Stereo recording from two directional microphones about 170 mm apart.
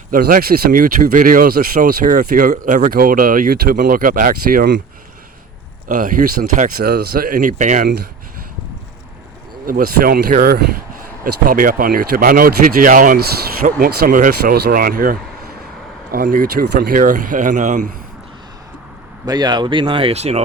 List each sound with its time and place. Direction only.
0.1 s speech: 55° right (ahead or behind)
5.9 s speech: 50° right (ahead or behind)
9.6 s speech: 55° right (ahead or behind)
19.2 s speech: 25° right (ahead or behind)